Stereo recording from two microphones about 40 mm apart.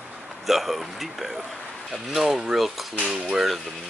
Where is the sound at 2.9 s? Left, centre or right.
Right.